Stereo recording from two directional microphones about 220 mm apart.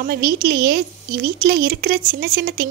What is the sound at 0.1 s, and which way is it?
Speech, 40° right (ahead or behind).